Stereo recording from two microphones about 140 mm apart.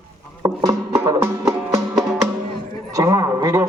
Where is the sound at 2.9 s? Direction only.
25° right (ahead or behind).